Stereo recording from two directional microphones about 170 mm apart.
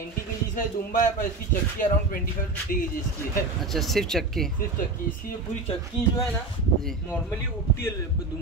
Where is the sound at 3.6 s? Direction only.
Centre (ahead or behind).